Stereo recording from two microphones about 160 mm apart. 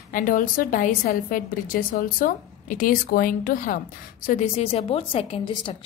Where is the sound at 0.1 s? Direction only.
60° left (ahead or behind).